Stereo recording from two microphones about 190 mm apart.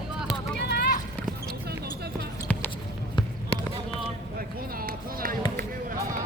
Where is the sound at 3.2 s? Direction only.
25° left (ahead or behind).